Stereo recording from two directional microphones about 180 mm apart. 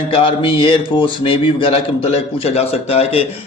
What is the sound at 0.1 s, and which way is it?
A man's voice, 30° left (ahead or behind).